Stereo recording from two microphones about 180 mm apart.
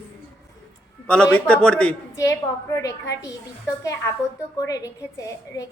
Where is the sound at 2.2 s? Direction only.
15° left (ahead or behind).